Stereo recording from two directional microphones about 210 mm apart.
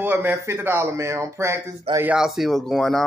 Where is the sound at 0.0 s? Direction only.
10° right (ahead or behind).